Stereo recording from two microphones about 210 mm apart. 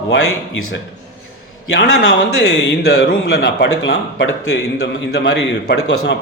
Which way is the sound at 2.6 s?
50° left (ahead or behind).